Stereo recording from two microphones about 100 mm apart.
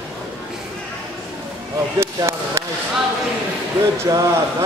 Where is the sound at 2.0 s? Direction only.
30° right (ahead or behind).